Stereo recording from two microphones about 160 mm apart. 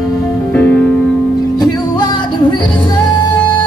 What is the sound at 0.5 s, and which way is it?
Music, 10° left (ahead or behind).